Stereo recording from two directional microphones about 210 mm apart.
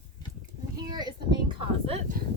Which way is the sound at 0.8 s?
20° right (ahead or behind).